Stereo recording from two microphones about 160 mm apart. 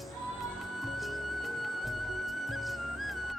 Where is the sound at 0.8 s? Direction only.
Centre (ahead or behind).